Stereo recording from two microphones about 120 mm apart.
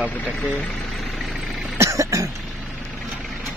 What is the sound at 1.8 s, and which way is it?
Cough, 25° right (ahead or behind).